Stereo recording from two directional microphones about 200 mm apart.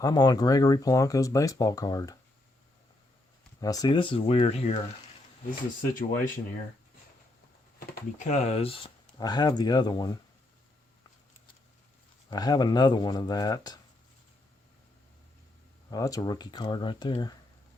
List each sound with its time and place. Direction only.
0.0 s speech: 20° left (ahead or behind)
3.6 s speech: 20° left (ahead or behind)
6.0 s speech: 40° left (ahead or behind)
8.2 s speech: 35° left (ahead or behind); by 10.2 s 20° left (ahead or behind)
12.3 s speech: 20° left (ahead or behind)
15.9 s speech: 15° left (ahead or behind)